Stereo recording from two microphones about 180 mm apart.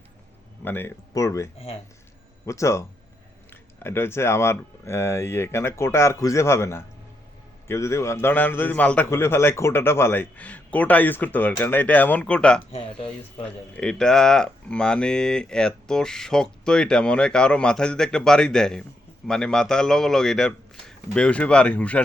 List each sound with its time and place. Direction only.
0.6 s a man's voice: 10° left (ahead or behind)
2.5 s a man's voice: 15° left (ahead or behind)
3.8 s a man's voice: 15° left (ahead or behind)
13.7 s speech: 5° left (ahead or behind)